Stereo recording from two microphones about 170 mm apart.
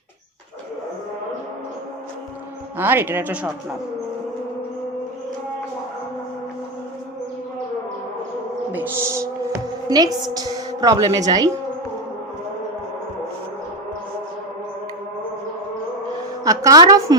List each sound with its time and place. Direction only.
2.7 s speech: 10° right (ahead or behind)
8.7 s music: 15° right (ahead or behind)
16.4 s a sound: 20° right (ahead or behind)